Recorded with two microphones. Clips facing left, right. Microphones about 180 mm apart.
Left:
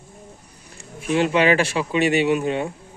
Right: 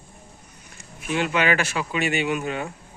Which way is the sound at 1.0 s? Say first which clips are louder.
Left 5 dB; 35° left (ahead or behind).